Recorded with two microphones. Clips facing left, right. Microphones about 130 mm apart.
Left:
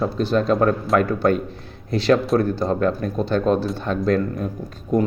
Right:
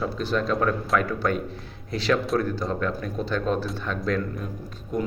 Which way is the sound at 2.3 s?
40° left (ahead or behind).